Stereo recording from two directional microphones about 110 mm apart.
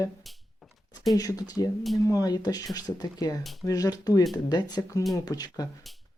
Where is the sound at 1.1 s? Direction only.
35° left (ahead or behind).